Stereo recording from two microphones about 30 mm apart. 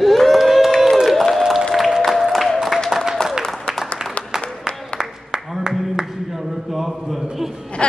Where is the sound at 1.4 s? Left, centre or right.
Centre.